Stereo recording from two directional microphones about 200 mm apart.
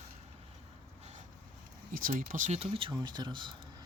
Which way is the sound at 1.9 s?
45° right (ahead or behind).